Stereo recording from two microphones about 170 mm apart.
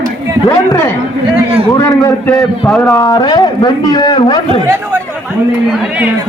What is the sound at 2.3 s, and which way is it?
Speech, 5° left (ahead or behind).